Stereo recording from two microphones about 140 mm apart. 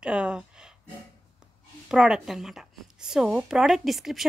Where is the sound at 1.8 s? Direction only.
5° right (ahead or behind).